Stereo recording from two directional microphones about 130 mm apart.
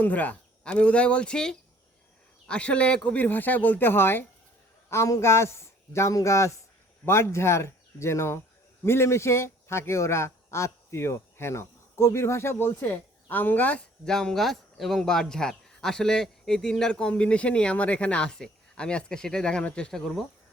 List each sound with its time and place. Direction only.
0.0 s a man's voice: 10° left (ahead or behind)